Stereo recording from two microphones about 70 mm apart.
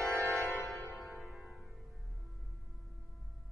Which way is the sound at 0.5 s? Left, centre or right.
Centre.